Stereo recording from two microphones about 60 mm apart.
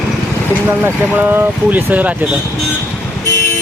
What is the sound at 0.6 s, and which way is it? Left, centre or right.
Speech, right.